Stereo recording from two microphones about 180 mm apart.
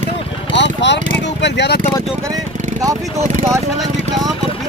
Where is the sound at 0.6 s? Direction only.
75° left (ahead or behind).